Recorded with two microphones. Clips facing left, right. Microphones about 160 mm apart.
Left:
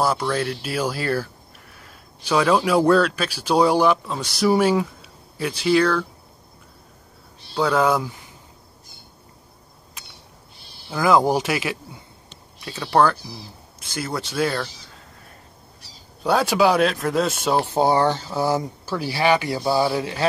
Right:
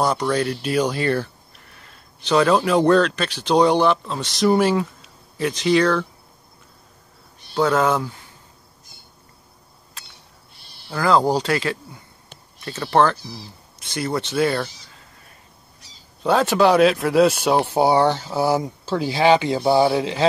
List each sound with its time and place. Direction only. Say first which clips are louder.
0.0 s speech: right 2 dB; 5° left (ahead or behind)
7.9 s speech: even; 15° left (ahead or behind)
10.9 s speech: even; 10° left (ahead or behind)
12.6 s speech: right 1 dB; centre (ahead or behind)
16.2 s a man's voice: right 2 dB; 5° left (ahead or behind)
17.6 s speech: even; 10° right (ahead or behind)